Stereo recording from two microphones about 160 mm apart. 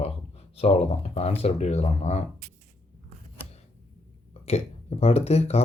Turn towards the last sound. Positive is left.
turn(degrees=40)  # may be behind; listen again after turning